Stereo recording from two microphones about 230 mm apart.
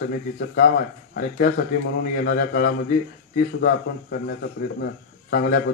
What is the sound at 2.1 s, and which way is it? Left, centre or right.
A man's voice, left.